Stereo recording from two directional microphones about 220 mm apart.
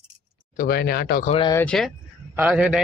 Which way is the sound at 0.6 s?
45° left (ahead or behind).